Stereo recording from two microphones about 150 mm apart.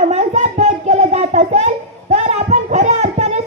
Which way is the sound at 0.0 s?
50° right (ahead or behind).